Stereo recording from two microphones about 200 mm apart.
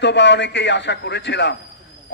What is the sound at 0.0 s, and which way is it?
A man's voice, 60° left (ahead or behind).